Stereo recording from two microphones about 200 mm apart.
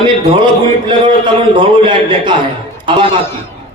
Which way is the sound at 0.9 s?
25° right (ahead or behind).